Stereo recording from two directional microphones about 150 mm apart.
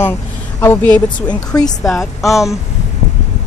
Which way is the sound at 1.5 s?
20° left (ahead or behind).